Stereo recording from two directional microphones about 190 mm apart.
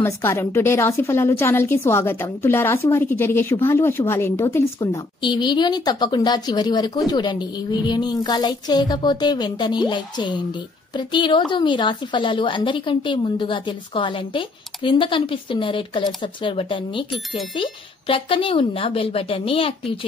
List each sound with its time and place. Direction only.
0.0 s a woman's voice: 15° left (ahead or behind)
5.2 s a woman's voice: 25° left (ahead or behind)